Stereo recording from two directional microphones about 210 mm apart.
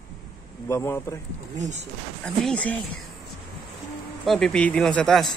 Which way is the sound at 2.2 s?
5° left (ahead or behind).